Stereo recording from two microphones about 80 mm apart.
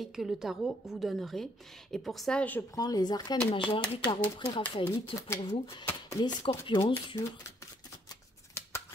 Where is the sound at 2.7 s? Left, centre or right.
Left.